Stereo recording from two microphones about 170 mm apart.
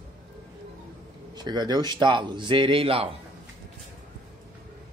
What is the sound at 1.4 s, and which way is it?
A man's voice, 25° right (ahead or behind).